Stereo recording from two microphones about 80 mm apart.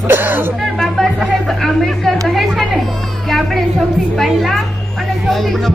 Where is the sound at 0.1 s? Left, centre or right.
Right.